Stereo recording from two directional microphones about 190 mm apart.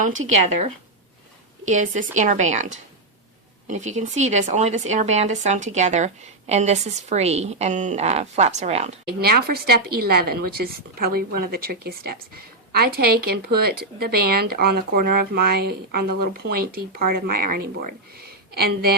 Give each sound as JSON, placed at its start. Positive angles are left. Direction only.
{"t": 1.6, "sound": "a woman's voice", "side_deg": -40}
{"t": 9.2, "sound": "speech", "side_deg": -55}